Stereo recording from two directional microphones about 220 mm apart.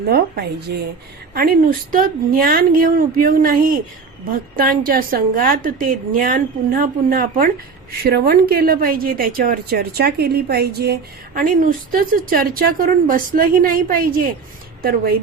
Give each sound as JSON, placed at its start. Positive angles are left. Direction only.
{"t": 0.7, "sound": "a woman's voice", "side_deg": -45}